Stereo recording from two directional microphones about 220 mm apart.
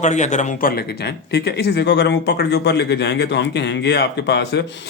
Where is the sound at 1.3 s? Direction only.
50° left (ahead or behind).